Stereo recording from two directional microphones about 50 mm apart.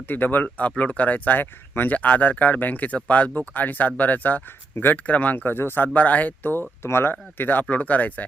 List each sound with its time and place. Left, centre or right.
0.1 s speech: left
6.8 s speech: left
7.1 s speech: left